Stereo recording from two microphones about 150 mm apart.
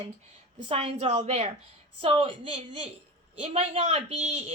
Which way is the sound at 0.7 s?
40° right (ahead or behind).